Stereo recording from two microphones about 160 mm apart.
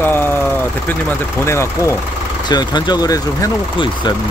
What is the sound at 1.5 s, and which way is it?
Speech, 15° left (ahead or behind).